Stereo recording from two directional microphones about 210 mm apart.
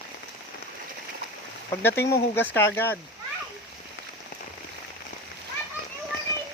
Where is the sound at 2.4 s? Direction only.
10° left (ahead or behind).